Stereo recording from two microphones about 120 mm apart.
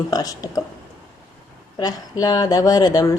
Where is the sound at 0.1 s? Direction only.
30° left (ahead or behind).